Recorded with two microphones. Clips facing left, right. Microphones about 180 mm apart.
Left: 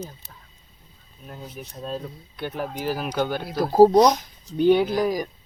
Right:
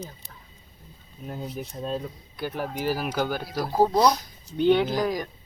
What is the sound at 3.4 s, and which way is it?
Speech, 45° left (ahead or behind).